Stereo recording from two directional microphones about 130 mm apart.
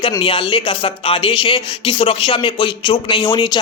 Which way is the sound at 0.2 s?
40° left (ahead or behind).